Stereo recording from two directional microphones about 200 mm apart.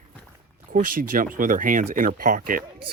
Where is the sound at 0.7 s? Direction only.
45° right (ahead or behind).